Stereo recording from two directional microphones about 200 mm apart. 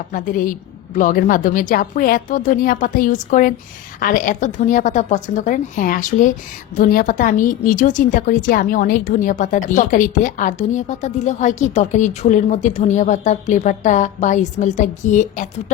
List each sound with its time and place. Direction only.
0.1 s a woman's voice: 45° left (ahead or behind)